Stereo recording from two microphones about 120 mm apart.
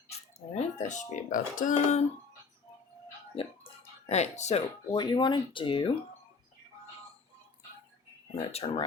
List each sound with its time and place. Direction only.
0.1 s speech: 70° left (ahead or behind); by 2.0 s 85° left
3.4 s speech: 50° left (ahead or behind)
4.1 s speech: 70° left (ahead or behind)
4.9 s speech: 40° left (ahead or behind)
8.4 s speech: 60° left (ahead or behind)